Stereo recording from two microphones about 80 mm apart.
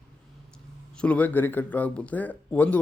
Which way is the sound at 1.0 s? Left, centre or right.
Centre.